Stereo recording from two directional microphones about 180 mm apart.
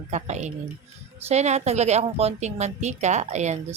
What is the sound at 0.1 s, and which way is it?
A woman's voice, 40° right (ahead or behind).